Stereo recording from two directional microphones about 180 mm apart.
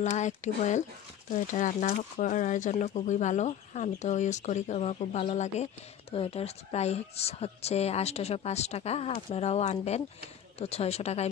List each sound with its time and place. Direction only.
0.0 s speech: 40° left (ahead or behind)